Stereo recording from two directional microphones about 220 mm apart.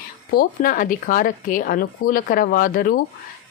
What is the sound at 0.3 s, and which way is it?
A woman's voice, 40° left (ahead or behind).